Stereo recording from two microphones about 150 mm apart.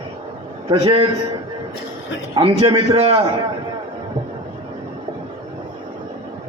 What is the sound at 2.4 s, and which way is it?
Speech, 40° right (ahead or behind).